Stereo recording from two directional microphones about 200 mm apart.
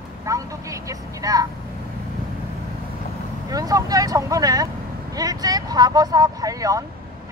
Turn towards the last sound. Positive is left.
turn(degrees=-15)  # may be behind; listen again after turning